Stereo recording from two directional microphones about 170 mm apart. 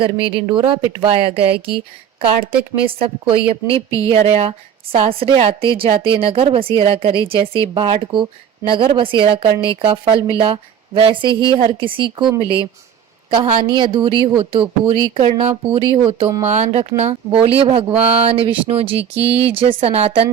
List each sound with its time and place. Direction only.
0.0 s speech: 30° right (ahead or behind)
3.0 s speech: 30° right (ahead or behind)
16.5 s speech: 40° right (ahead or behind)